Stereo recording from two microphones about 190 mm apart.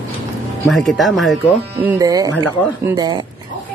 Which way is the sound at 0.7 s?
Centre (ahead or behind).